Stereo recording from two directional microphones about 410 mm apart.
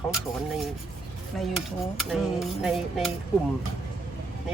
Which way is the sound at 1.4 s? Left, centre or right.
Centre.